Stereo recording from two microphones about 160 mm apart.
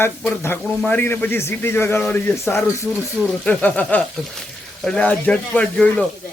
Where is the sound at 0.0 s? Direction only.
15° left (ahead or behind).